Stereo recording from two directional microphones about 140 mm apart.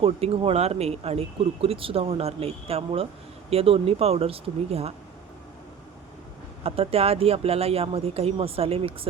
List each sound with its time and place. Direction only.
0.0 s speech: 45° right (ahead or behind)
6.6 s speech: 45° right (ahead or behind)